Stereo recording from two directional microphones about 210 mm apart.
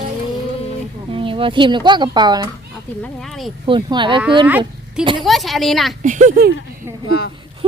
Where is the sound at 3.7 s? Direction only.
25° right (ahead or behind).